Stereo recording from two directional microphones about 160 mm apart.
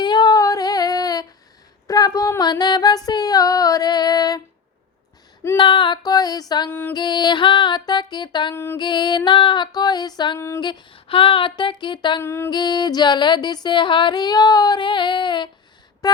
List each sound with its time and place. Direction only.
0.0 s female singing: 25° left (ahead or behind)
1.9 s a sound: 20° left (ahead or behind)
3.1 s female singing: 25° left (ahead or behind)
5.5 s female singing: 30° left (ahead or behind)
6.7 s female singing: 10° left (ahead or behind)
6.9 s music: 25° left (ahead or behind)
8.5 s female singing: 15° left (ahead or behind)
8.8 s music: 30° left (ahead or behind)
10.6 s music: 30° left (ahead or behind)
12.2 s female singing: 15° left (ahead or behind)
12.5 s music: 25° left (ahead or behind)